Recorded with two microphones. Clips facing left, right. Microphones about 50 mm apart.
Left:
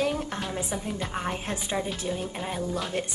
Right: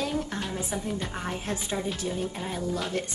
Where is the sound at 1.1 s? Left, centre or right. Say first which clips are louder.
Left 1 dB; left.